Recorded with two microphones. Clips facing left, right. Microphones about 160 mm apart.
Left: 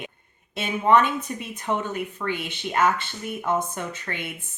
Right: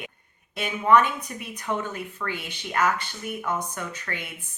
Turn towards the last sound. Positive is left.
turn(degrees=25)  # may be behind; listen again after turning